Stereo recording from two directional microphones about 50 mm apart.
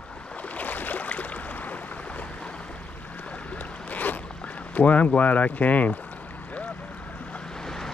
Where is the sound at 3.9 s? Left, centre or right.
Left.